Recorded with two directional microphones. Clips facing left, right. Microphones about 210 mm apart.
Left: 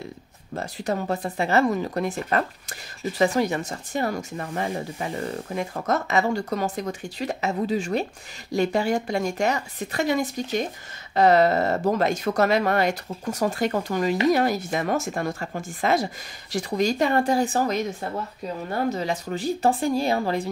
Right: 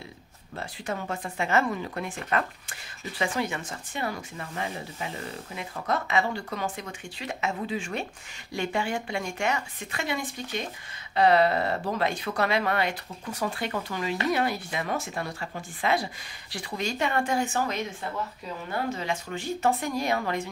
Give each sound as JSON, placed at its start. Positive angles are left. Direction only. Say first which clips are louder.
{"t": 0.6, "sound": "speech", "louder": "left 6 dB", "side_deg": 40}
{"t": 18.9, "sound": "speech", "louder": "left 5 dB", "side_deg": 40}